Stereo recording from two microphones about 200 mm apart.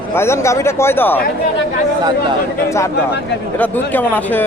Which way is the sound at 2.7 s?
15° left (ahead or behind).